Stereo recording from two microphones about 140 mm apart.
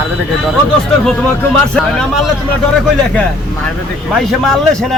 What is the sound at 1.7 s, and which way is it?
Speech, 5° left (ahead or behind).